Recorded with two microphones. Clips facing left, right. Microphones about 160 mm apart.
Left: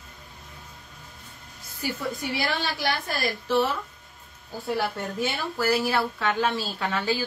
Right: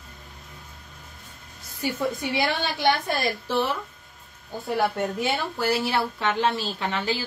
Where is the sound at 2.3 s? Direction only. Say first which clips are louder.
Right 3 dB; 25° right (ahead or behind).